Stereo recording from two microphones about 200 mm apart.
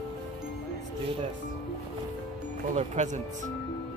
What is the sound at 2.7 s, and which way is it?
Speech, 35° right (ahead or behind).